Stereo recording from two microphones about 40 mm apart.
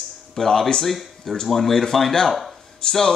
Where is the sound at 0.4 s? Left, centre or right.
Centre.